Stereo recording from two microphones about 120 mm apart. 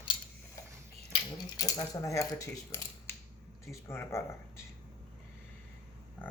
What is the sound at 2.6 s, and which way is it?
Mechanisms, 20° left (ahead or behind).